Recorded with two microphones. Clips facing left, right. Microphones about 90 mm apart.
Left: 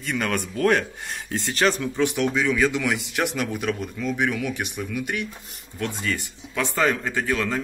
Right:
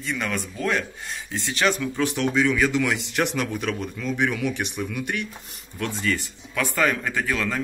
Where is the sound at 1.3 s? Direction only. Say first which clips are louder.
Left 1 dB; 40° left (ahead or behind).